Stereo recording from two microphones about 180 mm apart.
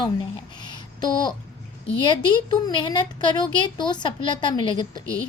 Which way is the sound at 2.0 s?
25° left (ahead or behind).